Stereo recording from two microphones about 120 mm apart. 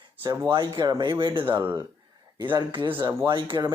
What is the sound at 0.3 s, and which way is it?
Speech, 40° right (ahead or behind).